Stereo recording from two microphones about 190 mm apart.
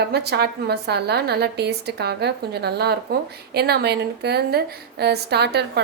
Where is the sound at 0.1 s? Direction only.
60° right (ahead or behind).